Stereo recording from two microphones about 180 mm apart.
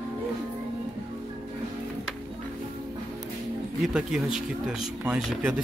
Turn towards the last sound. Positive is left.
turn(degrees=-5)  # may be behind; listen again after turning